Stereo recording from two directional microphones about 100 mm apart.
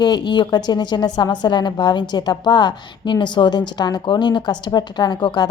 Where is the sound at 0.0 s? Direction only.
45° left (ahead or behind).